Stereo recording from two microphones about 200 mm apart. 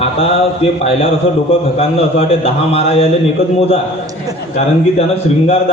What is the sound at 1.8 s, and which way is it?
A man's voice, 30° left (ahead or behind).